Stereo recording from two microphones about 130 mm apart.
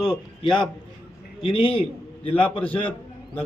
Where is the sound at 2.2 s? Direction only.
45° left (ahead or behind).